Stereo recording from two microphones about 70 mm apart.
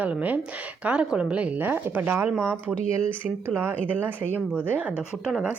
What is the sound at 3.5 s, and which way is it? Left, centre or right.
Speech, right.